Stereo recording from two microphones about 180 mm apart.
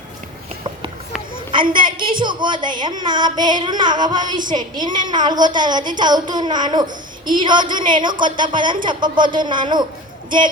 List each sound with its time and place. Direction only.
1.7 s a woman's voice: 25° right (ahead or behind)